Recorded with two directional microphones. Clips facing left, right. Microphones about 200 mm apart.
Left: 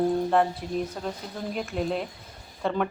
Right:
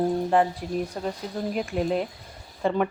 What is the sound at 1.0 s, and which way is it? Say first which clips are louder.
Speech: right 3 dB; 5° right (ahead or behind).